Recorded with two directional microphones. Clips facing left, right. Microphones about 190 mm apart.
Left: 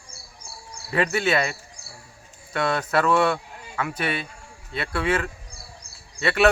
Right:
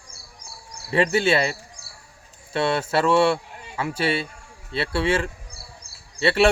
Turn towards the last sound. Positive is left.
turn(degrees=-30)  # may be behind; listen again after turning